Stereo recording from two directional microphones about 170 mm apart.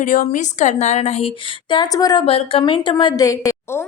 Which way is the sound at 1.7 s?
25° left (ahead or behind).